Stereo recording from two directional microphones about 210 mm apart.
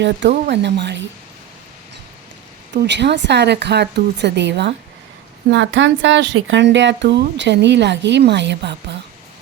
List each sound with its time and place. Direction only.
0.0 s speech: 60° right (ahead or behind)
2.8 s speech: 55° right (ahead or behind)